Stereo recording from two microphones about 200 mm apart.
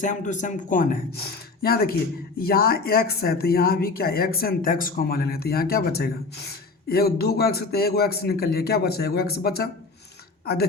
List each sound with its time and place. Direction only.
0.0 s speech: 40° left (ahead or behind)